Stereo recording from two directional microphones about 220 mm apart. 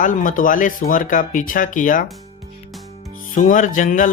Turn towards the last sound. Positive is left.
turn(degrees=35)  # may be behind; listen again after turning